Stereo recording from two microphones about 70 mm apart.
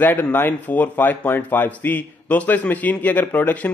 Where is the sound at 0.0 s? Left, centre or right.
Left.